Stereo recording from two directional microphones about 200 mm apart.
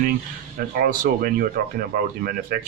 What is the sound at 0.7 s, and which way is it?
Speech, 45° right (ahead or behind).